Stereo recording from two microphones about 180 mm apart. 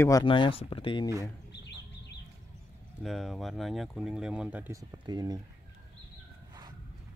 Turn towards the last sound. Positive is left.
turn(degrees=-20)  # may be behind; listen again after turning